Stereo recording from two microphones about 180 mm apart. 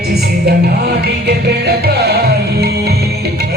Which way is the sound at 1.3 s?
65° right (ahead or behind).